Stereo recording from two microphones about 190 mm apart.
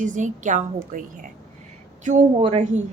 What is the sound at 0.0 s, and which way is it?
A woman's voice, 40° right (ahead or behind).